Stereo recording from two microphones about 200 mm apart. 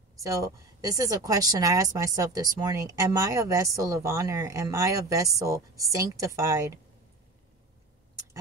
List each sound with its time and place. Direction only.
0.2 s a woman's voice: 15° right (ahead or behind)